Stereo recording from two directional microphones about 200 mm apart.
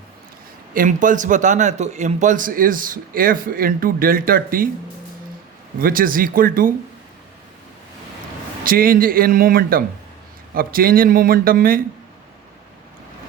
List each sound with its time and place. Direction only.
0.7 s a man's voice: 40° right (ahead or behind)
5.8 s a man's voice: 45° right (ahead or behind)
8.6 s a man's voice: 45° right (ahead or behind)